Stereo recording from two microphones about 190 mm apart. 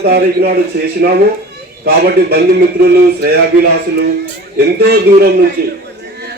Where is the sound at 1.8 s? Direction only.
55° right (ahead or behind).